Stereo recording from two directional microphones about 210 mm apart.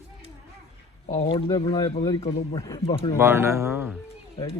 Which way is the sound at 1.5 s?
20° left (ahead or behind).